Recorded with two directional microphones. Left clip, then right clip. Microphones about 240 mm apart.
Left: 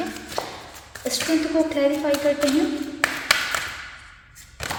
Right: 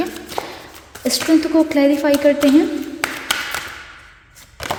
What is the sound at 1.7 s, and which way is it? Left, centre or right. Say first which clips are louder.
Speech: right 6 dB; right.